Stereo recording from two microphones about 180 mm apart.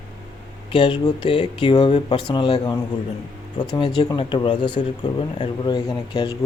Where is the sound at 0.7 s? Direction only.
25° left (ahead or behind).